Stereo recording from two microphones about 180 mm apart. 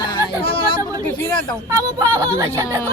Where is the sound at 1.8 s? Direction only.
20° right (ahead or behind).